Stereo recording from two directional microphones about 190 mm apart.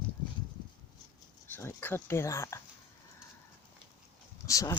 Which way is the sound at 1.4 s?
10° left (ahead or behind).